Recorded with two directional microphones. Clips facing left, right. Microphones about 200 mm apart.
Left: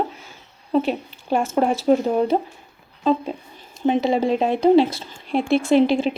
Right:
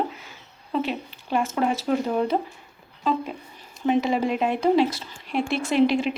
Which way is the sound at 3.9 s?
30° left (ahead or behind).